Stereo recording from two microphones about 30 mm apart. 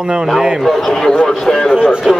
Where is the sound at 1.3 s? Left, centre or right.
Centre.